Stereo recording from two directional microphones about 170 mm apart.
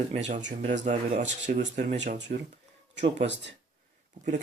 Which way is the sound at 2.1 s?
90° right.